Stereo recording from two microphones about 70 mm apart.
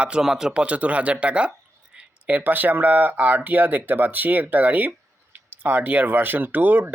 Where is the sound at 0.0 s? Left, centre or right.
Centre.